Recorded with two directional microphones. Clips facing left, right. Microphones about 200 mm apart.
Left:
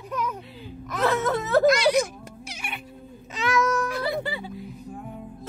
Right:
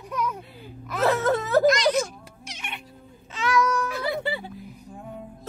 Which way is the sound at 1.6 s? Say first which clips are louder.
Left 1 dB; 10° left (ahead or behind).